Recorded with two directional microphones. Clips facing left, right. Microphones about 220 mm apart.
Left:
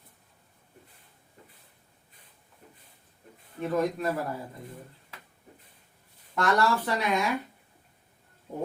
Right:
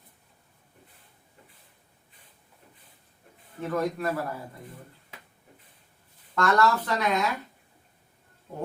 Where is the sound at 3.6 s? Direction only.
20° left (ahead or behind).